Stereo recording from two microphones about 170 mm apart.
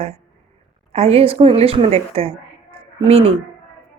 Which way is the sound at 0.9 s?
35° right (ahead or behind).